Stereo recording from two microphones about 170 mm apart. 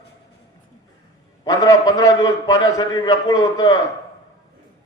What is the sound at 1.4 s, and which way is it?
A man's voice, 20° left (ahead or behind).